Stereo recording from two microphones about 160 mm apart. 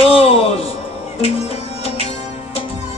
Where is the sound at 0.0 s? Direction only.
40° left (ahead or behind).